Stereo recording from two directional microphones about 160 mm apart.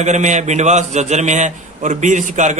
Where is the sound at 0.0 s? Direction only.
45° right (ahead or behind).